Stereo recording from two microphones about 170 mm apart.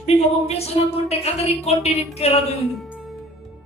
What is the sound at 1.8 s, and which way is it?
Music, 40° left (ahead or behind).